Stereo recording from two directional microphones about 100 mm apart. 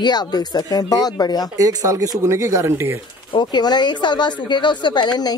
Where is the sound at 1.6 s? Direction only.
35° right (ahead or behind).